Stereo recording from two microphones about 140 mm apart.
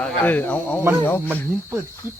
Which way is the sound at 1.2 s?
15° right (ahead or behind).